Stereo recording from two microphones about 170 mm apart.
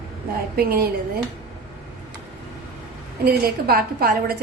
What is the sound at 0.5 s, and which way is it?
Speech, 60° right (ahead or behind).